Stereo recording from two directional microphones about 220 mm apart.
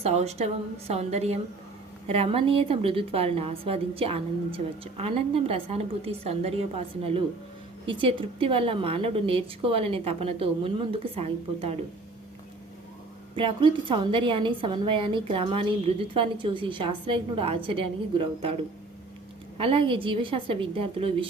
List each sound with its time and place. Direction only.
0.0 s a woman's voice: 30° right (ahead or behind)
13.3 s a woman's voice: 20° right (ahead or behind)
19.5 s a woman's voice: 25° right (ahead or behind)